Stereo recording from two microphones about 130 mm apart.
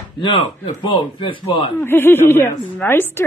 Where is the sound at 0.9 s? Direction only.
40° left (ahead or behind).